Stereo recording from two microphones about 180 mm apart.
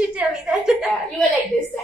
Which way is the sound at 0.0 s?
5° right (ahead or behind).